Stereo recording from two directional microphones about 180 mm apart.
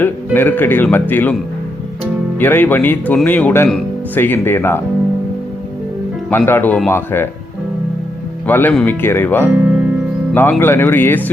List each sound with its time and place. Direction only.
0.0 s speech: 10° left (ahead or behind)
2.4 s speech: 10° left (ahead or behind)
6.3 s speech: 10° left (ahead or behind)
8.4 s speech: 10° left (ahead or behind)
9.6 s speech: 5° right (ahead or behind)
10.6 s speech: 10° left (ahead or behind)